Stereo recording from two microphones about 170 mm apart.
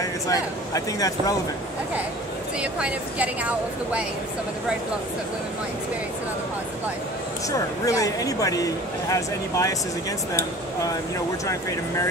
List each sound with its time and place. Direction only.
0.0 s speech: 20° left (ahead or behind)
2.6 s a woman's voice: 5° right (ahead or behind)
7.4 s speech: 20° left (ahead or behind)
11.4 s speech: 20° left (ahead or behind)